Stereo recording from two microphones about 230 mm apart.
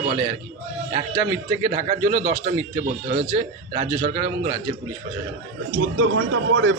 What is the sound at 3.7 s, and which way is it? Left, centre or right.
Speech, right.